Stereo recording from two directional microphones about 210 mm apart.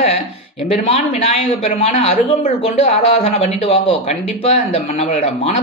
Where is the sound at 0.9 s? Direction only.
30° left (ahead or behind).